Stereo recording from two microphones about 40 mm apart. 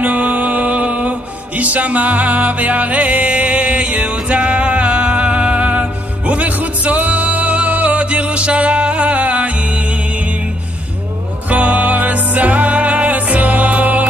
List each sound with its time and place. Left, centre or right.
0.0 s music: right
11.4 s music: right